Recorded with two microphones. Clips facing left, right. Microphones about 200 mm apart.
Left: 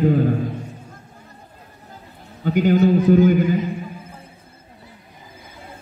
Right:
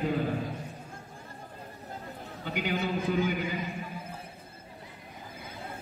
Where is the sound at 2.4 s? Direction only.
45° left (ahead or behind).